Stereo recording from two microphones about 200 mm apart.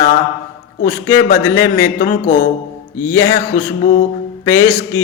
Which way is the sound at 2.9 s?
15° left (ahead or behind).